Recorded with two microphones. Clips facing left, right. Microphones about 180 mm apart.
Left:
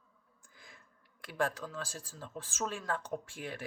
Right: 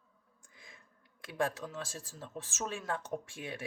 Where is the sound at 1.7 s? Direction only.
25° right (ahead or behind).